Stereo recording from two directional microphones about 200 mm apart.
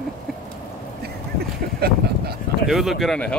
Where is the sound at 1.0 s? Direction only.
50° right (ahead or behind).